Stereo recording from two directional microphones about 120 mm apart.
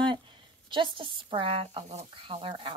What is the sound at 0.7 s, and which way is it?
Speech, 45° right (ahead or behind).